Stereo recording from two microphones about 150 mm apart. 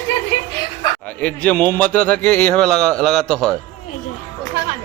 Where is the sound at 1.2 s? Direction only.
10° left (ahead or behind).